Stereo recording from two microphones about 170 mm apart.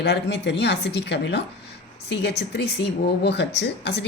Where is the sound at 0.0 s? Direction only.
90° left.